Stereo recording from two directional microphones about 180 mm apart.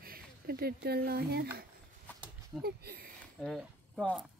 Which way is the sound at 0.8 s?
60° right (ahead or behind).